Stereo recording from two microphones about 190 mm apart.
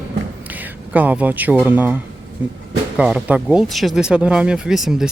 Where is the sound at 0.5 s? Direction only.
10° right (ahead or behind).